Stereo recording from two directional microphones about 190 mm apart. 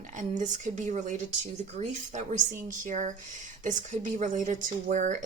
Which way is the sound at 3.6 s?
40° right (ahead or behind).